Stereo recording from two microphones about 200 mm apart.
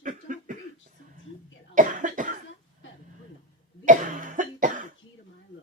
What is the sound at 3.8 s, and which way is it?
Cough, 40° right (ahead or behind).